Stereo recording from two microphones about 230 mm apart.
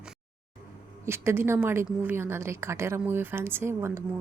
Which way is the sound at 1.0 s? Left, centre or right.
Centre.